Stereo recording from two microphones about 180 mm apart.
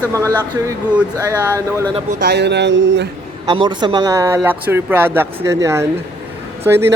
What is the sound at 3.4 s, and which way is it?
Speech, 25° right (ahead or behind).